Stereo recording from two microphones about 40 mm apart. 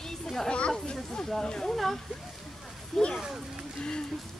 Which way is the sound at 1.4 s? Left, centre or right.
Centre.